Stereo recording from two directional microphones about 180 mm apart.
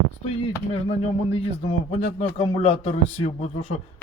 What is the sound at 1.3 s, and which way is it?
Speech, 35° left (ahead or behind).